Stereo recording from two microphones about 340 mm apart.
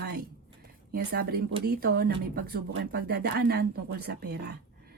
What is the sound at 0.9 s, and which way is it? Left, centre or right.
Speech, right.